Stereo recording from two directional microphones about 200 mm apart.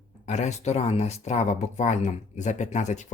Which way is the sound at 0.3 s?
35° left (ahead or behind).